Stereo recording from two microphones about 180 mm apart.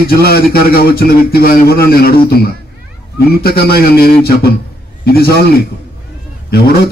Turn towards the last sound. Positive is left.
turn(degrees=60)  # may be behind; listen again after turning